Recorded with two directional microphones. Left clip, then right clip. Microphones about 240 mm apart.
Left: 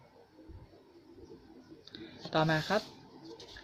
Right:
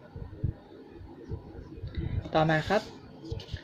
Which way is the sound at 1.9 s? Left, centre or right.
Left.